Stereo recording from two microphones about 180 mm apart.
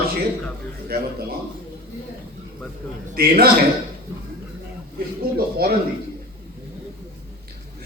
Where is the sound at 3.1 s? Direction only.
60° right (ahead or behind).